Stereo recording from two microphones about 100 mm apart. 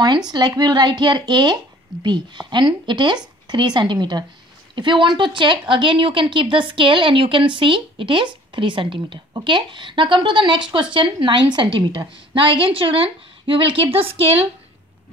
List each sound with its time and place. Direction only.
0.3 s speech: 45° right (ahead or behind); by 14.5 s 70° right (ahead or behind)